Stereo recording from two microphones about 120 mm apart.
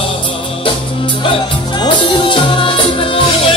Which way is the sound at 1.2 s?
45° left (ahead or behind).